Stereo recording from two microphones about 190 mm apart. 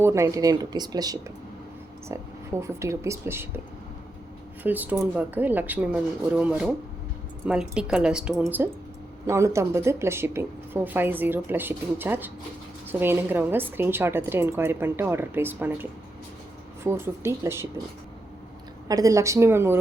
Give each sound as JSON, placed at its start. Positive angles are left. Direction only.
{"t": 0.0, "sound": "speech", "side_deg": -15}
{"t": 2.6, "sound": "speech", "side_deg": -15}
{"t": 4.6, "sound": "speech", "side_deg": -10}
{"t": 18.9, "sound": "speech", "side_deg": -20}